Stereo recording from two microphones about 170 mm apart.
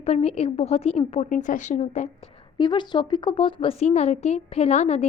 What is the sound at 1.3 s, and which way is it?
A woman's voice, 50° left (ahead or behind).